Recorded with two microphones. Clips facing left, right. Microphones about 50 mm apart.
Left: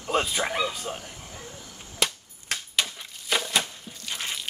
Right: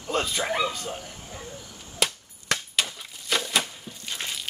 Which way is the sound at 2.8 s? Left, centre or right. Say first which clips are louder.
Even; centre.